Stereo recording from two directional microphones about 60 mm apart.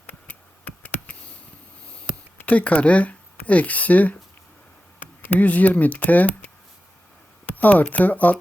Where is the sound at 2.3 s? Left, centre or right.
Left.